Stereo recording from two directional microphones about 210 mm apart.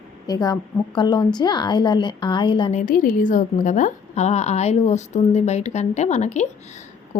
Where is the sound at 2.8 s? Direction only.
40° left (ahead or behind).